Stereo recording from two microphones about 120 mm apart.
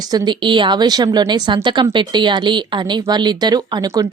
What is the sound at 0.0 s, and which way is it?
A woman's voice, 30° right (ahead or behind).